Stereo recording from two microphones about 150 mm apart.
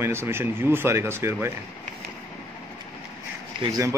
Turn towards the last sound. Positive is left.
turn(degrees=-25)  # may be behind; listen again after turning